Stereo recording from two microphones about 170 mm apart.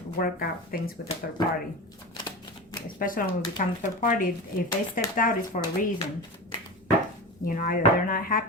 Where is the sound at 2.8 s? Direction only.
55° left (ahead or behind).